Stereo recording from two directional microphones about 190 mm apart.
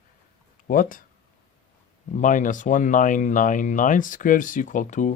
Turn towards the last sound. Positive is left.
turn(degrees=40)  # may be behind; listen again after turning